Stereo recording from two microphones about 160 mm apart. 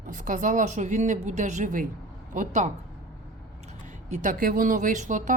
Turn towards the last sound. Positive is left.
turn(degrees=-50)  # may be behind; listen again after turning